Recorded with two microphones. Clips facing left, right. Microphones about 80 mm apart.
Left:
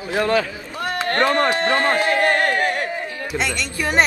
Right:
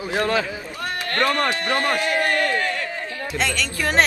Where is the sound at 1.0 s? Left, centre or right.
Left.